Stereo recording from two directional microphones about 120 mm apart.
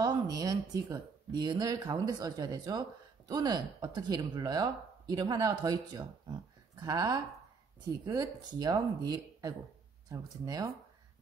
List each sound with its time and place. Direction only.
0.0 s speech: 30° right (ahead or behind)